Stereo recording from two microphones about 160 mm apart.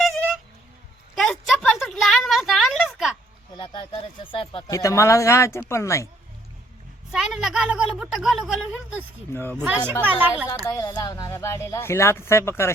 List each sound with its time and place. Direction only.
1.1 s a sound: centre (ahead or behind)
3.6 s speech: 25° left (ahead or behind)
4.7 s speech: 20° left (ahead or behind)
7.1 s a woman's voice: centre (ahead or behind)
9.3 s speech: 15° left (ahead or behind)
9.6 s a woman's voice: 10° right (ahead or behind)
10.7 s speech: 25° left (ahead or behind)